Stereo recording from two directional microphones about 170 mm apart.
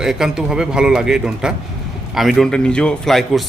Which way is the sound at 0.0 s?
5° right (ahead or behind).